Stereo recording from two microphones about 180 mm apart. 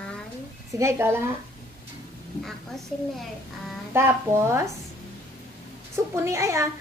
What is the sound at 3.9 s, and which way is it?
Speech, 15° right (ahead or behind).